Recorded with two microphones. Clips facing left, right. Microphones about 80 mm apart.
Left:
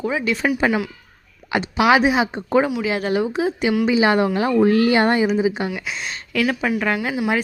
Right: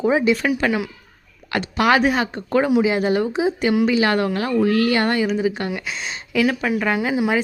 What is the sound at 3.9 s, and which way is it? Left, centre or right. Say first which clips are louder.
A woman's voice: left 2 dB; centre.